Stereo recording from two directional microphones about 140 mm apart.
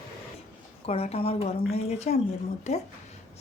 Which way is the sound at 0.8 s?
45° left (ahead or behind).